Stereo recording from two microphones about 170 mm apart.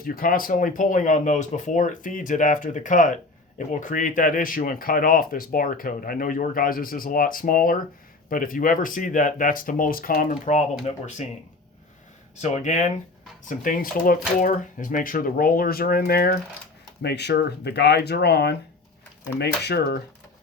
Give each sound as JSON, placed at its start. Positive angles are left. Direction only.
{"t": 0.0, "sound": "speech", "side_deg": 55}
{"t": 12.4, "sound": "speech", "side_deg": 45}
{"t": 17.0, "sound": "speech", "side_deg": 75}